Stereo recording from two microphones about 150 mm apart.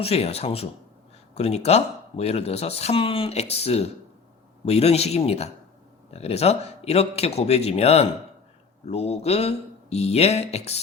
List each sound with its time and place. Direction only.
0.0 s speech: 45° left (ahead or behind)